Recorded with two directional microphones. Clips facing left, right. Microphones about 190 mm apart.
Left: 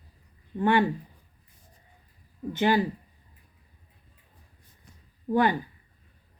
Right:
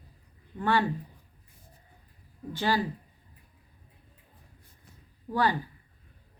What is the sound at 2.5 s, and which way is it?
Speech, 20° left (ahead or behind).